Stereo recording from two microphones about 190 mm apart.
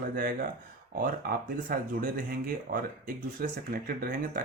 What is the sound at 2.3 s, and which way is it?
Speech, 50° right (ahead or behind).